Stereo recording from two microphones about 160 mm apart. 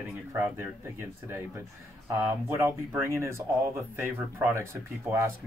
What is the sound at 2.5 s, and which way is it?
A man's voice, 15° right (ahead or behind).